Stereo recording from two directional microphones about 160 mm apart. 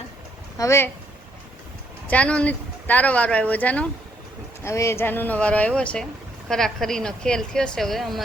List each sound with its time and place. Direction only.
0.6 s speech: 15° left (ahead or behind)
2.0 s a woman's voice: 5° left (ahead or behind)